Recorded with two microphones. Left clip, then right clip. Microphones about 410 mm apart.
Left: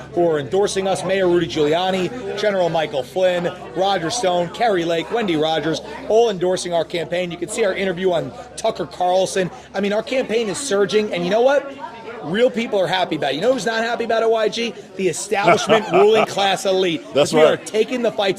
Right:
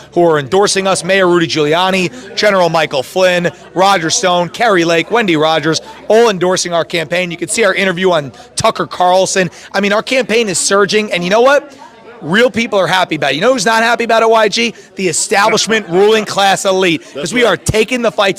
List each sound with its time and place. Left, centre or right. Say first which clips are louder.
0.3 s speech: right 9 dB; right